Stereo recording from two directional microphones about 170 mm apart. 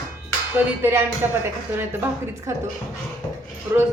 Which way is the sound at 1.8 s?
15° right (ahead or behind).